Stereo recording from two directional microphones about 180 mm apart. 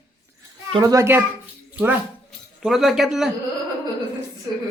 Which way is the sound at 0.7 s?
20° right (ahead or behind).